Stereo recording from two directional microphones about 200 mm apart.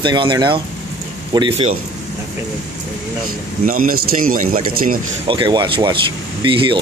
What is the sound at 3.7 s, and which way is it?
A man's voice, 45° right (ahead or behind).